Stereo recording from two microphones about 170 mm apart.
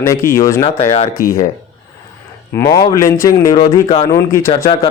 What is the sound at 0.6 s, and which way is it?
Speech, 40° left (ahead or behind).